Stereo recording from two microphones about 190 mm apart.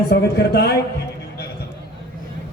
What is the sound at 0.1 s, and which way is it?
Speech, 60° left (ahead or behind).